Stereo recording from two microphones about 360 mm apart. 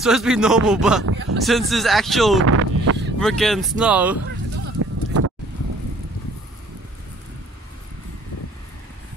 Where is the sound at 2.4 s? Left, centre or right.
Right.